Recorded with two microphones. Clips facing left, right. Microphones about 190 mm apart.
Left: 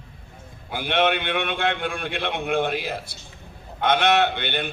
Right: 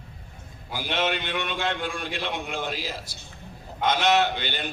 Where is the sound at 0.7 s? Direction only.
60° left (ahead or behind).